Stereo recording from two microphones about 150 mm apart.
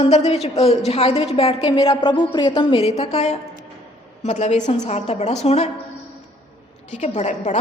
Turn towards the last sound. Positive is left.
turn(degrees=50)  # may be behind; listen again after turning